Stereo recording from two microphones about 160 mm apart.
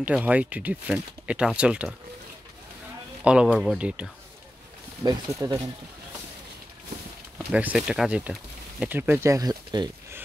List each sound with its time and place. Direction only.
0.0 s speech: 10° right (ahead or behind)
3.4 s speech: centre (ahead or behind)
5.0 s speech: 20° right (ahead or behind)
7.3 s speech: 10° right (ahead or behind); by 9.8 s 25° right (ahead or behind)